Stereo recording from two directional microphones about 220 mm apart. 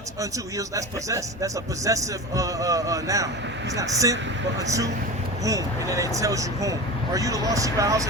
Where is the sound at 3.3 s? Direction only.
55° right (ahead or behind).